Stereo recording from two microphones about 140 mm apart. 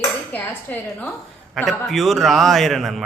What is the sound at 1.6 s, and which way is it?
A man's voice, centre (ahead or behind).